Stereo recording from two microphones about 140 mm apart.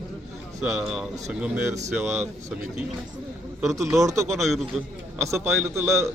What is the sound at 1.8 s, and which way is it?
Speech, 15° right (ahead or behind).